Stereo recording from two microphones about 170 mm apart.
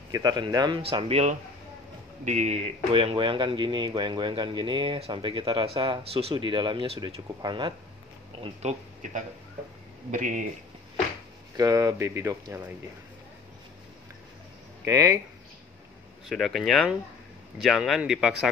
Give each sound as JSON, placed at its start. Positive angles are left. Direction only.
{"t": 0.1, "sound": "speech", "side_deg": -25}
{"t": 8.6, "sound": "speech", "side_deg": -40}
{"t": 10.1, "sound": "speech", "side_deg": -50}
{"t": 11.5, "sound": "speech", "side_deg": -20}
{"t": 14.9, "sound": "speech", "side_deg": -20}
{"t": 16.3, "sound": "a man's voice", "side_deg": 0}